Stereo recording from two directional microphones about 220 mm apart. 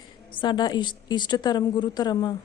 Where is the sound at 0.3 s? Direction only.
20° left (ahead or behind).